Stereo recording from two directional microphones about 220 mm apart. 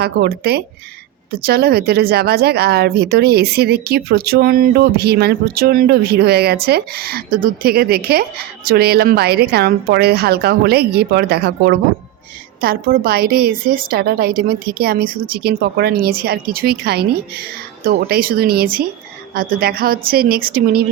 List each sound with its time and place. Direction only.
0.0 s speech: 45° right (ahead or behind)